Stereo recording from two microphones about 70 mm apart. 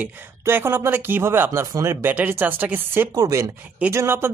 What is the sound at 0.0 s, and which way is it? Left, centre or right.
Speech, right.